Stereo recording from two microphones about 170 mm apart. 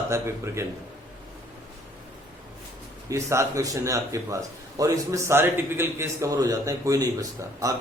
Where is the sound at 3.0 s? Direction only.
15° right (ahead or behind).